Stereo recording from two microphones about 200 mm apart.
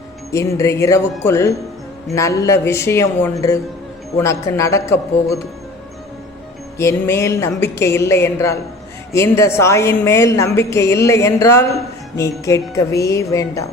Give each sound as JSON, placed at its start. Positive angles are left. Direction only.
{"t": 0.3, "sound": "a woman's voice", "side_deg": 15}
{"t": 6.7, "sound": "a woman's voice", "side_deg": 15}